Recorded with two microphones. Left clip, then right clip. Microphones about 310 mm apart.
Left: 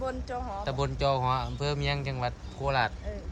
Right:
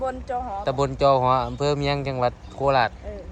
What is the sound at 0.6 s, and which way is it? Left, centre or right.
Speech, centre.